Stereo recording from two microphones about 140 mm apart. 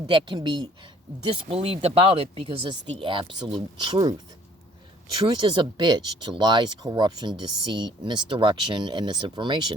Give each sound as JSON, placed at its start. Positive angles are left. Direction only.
{"t": 0.1, "sound": "speech", "side_deg": -35}
{"t": 1.2, "sound": "speech", "side_deg": -45}
{"t": 5.1, "sound": "speech", "side_deg": -30}